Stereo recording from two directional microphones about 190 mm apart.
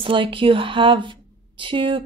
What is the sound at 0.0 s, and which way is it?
Speech, 25° right (ahead or behind).